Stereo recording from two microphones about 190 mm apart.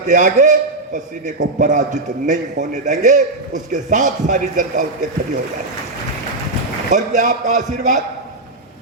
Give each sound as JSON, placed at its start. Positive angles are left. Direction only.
{"t": 0.1, "sound": "a man's voice", "side_deg": -45}
{"t": 1.5, "sound": "a man's voice", "side_deg": -40}
{"t": 6.9, "sound": "a man's voice", "side_deg": -40}